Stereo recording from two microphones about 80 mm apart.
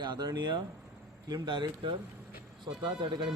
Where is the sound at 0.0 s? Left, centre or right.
Right.